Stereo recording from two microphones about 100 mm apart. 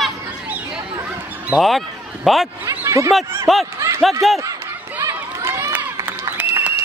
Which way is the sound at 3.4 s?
Centre (ahead or behind).